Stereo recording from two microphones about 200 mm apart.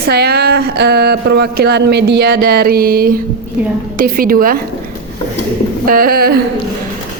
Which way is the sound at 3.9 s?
45° right (ahead or behind).